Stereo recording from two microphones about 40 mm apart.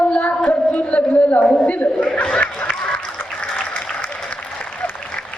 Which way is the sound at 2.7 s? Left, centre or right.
Left.